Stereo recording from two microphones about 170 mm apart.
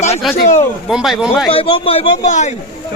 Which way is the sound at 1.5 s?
35° left (ahead or behind).